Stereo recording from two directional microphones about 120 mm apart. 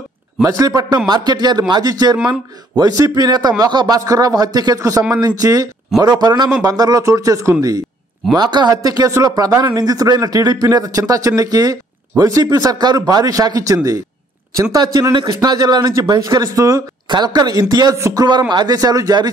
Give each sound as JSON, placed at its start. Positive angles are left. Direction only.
{"t": 0.4, "sound": "a man's voice", "side_deg": -30}